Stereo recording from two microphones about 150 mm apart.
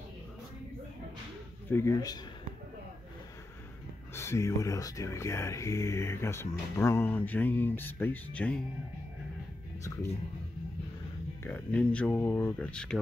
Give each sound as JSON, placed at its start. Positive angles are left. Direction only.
{"t": 1.7, "sound": "speech", "side_deg": 20}
{"t": 4.1, "sound": "speech", "side_deg": 15}
{"t": 11.4, "sound": "speech", "side_deg": 10}